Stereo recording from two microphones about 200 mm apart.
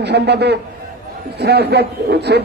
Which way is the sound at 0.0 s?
55° right (ahead or behind).